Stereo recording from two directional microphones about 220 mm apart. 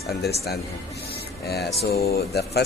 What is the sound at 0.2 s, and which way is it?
Speech, 45° left (ahead or behind).